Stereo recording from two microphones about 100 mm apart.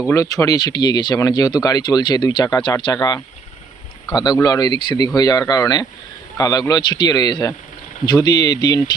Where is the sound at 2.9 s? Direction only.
40° left (ahead or behind).